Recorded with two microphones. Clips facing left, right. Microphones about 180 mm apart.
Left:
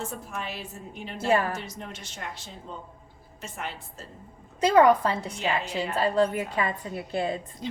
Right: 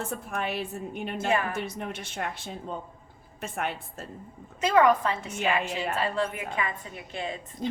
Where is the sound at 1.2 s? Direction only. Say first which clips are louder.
Left 4 dB; 35° left (ahead or behind).